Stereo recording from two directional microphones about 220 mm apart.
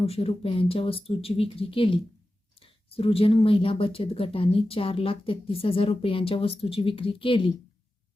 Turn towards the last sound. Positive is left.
turn(degrees=25)  # may be behind; listen again after turning